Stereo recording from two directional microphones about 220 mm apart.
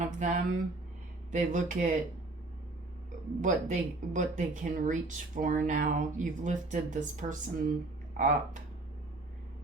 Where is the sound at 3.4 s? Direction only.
35° right (ahead or behind).